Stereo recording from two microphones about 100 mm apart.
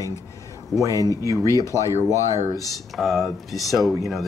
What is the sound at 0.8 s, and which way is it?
Speech, 35° left (ahead or behind).